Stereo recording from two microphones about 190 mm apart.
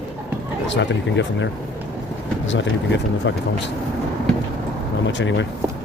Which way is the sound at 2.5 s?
75° left (ahead or behind).